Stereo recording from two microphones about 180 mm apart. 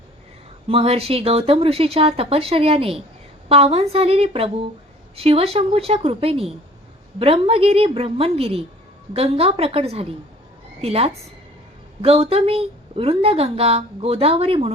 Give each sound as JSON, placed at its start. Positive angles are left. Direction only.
{"t": 0.7, "sound": "a woman's voice", "side_deg": -30}